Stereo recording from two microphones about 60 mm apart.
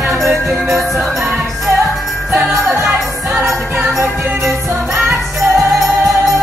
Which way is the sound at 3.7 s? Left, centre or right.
Centre.